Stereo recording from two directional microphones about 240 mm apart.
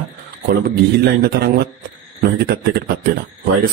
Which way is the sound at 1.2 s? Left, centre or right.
Right.